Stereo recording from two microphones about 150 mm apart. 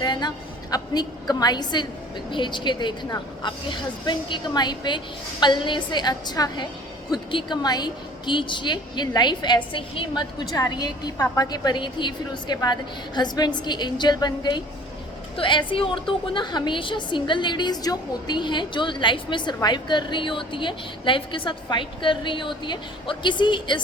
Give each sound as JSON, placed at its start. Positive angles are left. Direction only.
{"t": 0.0, "sound": "a woman's voice", "side_deg": 30}